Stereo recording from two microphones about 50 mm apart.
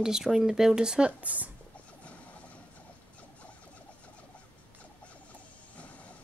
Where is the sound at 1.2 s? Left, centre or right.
Right.